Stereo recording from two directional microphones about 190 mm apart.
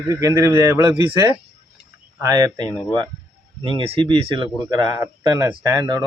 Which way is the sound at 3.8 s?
30° right (ahead or behind).